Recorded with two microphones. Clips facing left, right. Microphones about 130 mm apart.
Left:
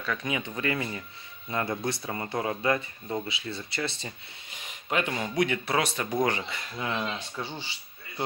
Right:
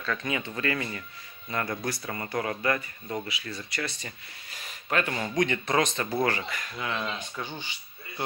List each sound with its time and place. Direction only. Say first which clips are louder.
0.0 s speech: even; 10° left (ahead or behind)
6.1 s speech: left 1 dB; 20° left (ahead or behind)